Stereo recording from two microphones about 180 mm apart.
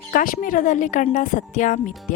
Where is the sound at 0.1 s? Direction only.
50° left (ahead or behind).